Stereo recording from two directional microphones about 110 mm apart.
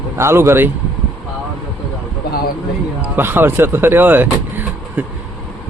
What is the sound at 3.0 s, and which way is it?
Speech, 20° right (ahead or behind).